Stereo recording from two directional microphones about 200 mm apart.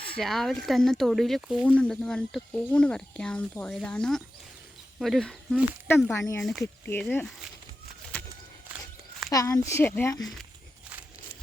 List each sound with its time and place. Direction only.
0.1 s speech: centre (ahead or behind)
6.1 s speech: 15° left (ahead or behind)
6.4 s speech: centre (ahead or behind)
9.3 s speech: 15° left (ahead or behind)